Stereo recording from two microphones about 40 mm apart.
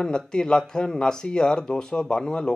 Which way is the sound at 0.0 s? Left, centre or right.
Left.